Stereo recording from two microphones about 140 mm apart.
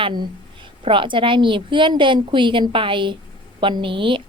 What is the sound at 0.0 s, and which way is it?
A woman's voice, 30° right (ahead or behind).